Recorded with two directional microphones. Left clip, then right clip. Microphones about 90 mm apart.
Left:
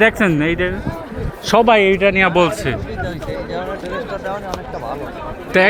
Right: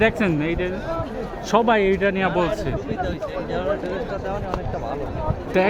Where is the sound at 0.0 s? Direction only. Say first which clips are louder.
Left 6 dB; 55° left (ahead or behind).